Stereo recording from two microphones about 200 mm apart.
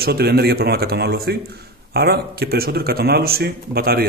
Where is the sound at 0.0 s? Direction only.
50° right (ahead or behind).